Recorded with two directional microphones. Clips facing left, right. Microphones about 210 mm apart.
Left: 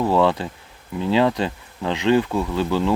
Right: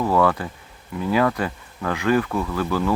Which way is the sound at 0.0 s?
25° left (ahead or behind).